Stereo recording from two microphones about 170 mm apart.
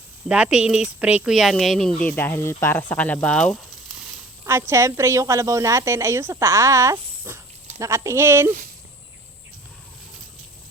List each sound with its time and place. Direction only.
0.3 s speech: 5° right (ahead or behind)
4.4 s a woman's voice: 15° right (ahead or behind)